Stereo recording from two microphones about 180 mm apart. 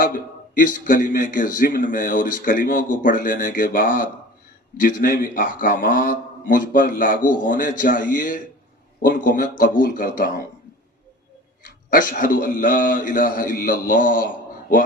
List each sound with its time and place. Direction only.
0.0 s a man's voice: 50° left (ahead or behind)
11.6 s a man's voice: 50° left (ahead or behind)